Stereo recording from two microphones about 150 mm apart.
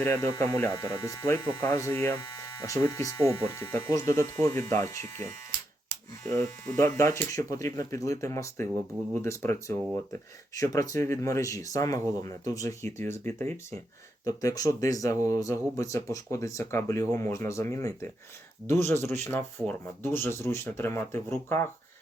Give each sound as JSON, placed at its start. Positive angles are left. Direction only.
{"t": 0.0, "sound": "speech", "side_deg": 20}
{"t": 6.2, "sound": "speech", "side_deg": 25}